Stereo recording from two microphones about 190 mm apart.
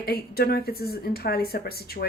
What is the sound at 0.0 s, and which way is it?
A woman's voice, 55° left (ahead or behind).